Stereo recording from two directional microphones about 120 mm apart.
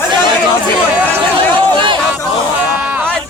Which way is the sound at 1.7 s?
40° right (ahead or behind).